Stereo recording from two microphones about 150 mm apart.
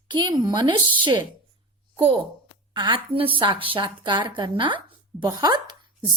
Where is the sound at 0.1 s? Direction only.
30° right (ahead or behind).